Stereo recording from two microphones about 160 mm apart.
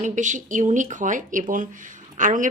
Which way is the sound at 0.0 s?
50° right (ahead or behind).